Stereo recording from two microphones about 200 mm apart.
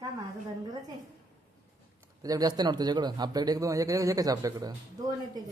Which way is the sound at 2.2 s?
20° right (ahead or behind).